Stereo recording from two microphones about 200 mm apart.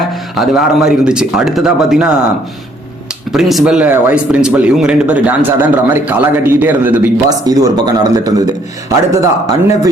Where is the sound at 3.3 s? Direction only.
Centre (ahead or behind).